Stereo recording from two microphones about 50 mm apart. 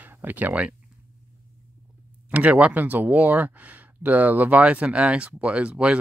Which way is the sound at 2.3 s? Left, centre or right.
Right.